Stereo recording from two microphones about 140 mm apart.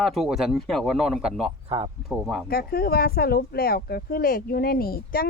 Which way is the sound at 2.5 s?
90° left.